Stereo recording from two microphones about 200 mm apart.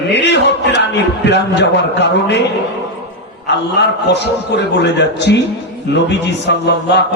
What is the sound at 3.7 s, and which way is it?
A man's voice, 60° left (ahead or behind).